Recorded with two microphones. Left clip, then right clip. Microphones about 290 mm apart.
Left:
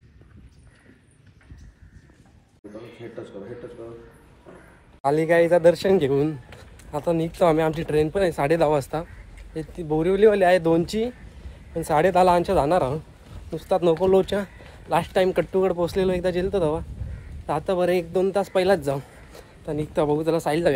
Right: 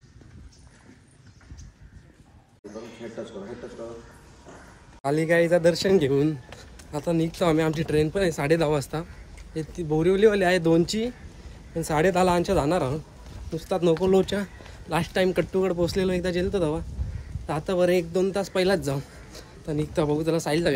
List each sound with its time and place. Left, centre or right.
5.0 s a man's voice: centre